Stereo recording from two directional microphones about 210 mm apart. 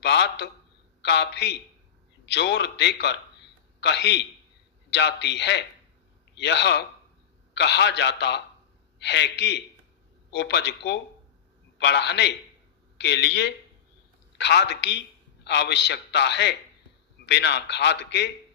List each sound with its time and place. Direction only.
0.0 s a man's voice: 55° left (ahead or behind)